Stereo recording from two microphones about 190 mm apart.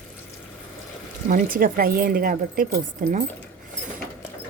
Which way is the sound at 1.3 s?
45° right (ahead or behind).